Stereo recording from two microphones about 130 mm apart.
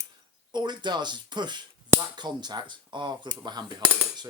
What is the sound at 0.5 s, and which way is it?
Speech, 35° right (ahead or behind).